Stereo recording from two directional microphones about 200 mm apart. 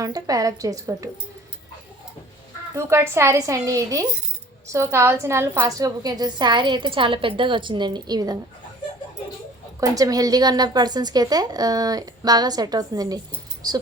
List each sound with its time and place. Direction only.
0.0 s speech: 20° right (ahead or behind)
2.7 s a woman's voice: 15° right (ahead or behind)
9.9 s a woman's voice: 15° right (ahead or behind)